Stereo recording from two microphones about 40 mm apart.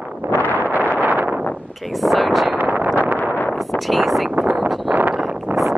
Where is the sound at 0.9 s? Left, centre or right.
Right.